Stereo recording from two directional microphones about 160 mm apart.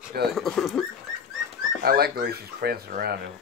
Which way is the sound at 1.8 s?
70° right (ahead or behind).